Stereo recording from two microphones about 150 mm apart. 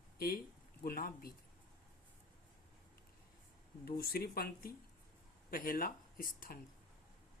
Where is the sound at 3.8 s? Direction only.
90° left.